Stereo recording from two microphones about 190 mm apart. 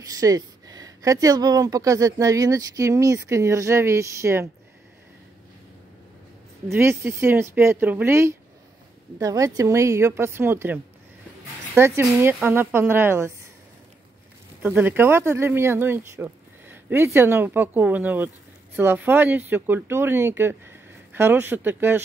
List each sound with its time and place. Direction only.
0.0 s speech: 20° right (ahead or behind)
6.7 s speech: 15° right (ahead or behind)
14.6 s speech: 10° right (ahead or behind)